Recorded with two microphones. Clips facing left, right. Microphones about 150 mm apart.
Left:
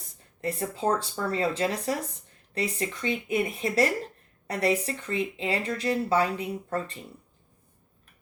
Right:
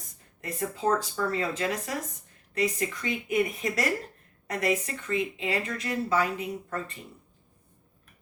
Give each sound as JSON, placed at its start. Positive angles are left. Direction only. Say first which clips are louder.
{"t": 0.4, "sound": "a woman's voice", "louder": "left 1 dB", "side_deg": 30}